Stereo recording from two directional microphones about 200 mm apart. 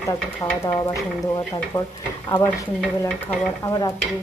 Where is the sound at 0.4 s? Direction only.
10° left (ahead or behind).